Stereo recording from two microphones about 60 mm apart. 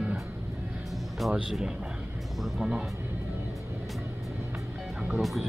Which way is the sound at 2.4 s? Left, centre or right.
Centre.